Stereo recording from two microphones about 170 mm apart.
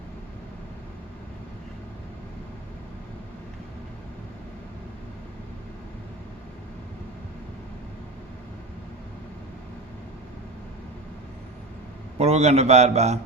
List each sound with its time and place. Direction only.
12.2 s a man's voice: 40° right (ahead or behind)